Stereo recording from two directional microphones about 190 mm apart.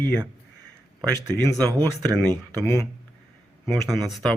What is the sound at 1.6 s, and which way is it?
Speech, 20° right (ahead or behind).